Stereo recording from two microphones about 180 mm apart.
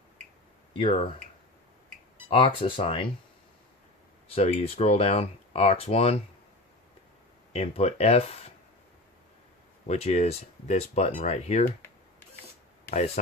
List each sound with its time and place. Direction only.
0.8 s speech: 30° left (ahead or behind)
2.3 s speech: 30° left (ahead or behind)
4.4 s speech: 35° left (ahead or behind)
7.5 s speech: 35° left (ahead or behind)
9.8 s speech: 35° left (ahead or behind)